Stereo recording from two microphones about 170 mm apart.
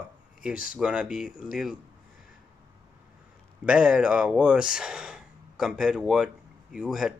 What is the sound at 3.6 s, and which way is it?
Speech, 5° right (ahead or behind).